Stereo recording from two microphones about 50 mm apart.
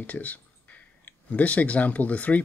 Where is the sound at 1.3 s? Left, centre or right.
Left.